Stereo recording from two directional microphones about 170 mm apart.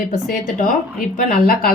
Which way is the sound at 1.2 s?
60° left (ahead or behind).